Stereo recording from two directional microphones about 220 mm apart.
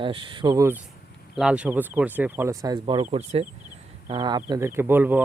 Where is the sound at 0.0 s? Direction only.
20° right (ahead or behind).